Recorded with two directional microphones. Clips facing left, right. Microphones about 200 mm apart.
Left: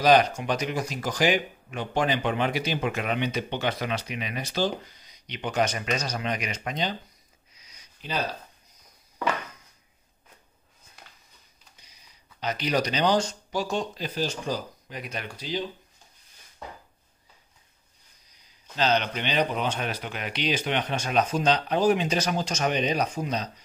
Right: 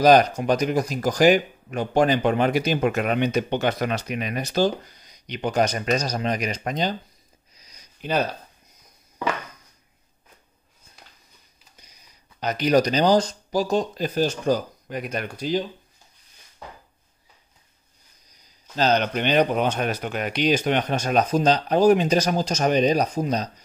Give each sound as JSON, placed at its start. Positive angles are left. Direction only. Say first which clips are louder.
{"t": 0.0, "sound": "speech", "louder": "right 4 dB", "side_deg": -40}
{"t": 7.5, "sound": "a sound", "louder": "right 3 dB", "side_deg": -40}
{"t": 8.0, "sound": "speech", "louder": "right 7 dB", "side_deg": -50}
{"t": 12.4, "sound": "speech", "louder": "right 7 dB", "side_deg": -45}
{"t": 18.8, "sound": "speech", "louder": "right 4 dB", "side_deg": -45}